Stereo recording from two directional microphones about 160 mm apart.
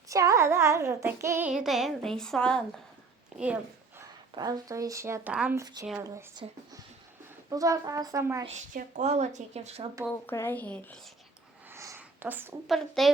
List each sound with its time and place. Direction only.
0.1 s child singing: 20° right (ahead or behind)
1.5 s a woman's voice: 5° right (ahead or behind)
3.3 s a sound: 10° right (ahead or behind)
4.4 s speech: 25° right (ahead or behind)
5.3 s a woman's voice: 5° right (ahead or behind)
5.5 s speech: 25° right (ahead or behind)
7.5 s speech: 20° right (ahead or behind)
8.4 s speech: 45° right (ahead or behind)
10.2 s speech: 15° left (ahead or behind)
11.7 s a sound: 15° right (ahead or behind)
12.6 s a woman's voice: centre (ahead or behind)